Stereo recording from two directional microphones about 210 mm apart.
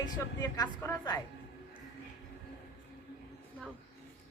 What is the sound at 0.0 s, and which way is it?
Speech, 20° left (ahead or behind).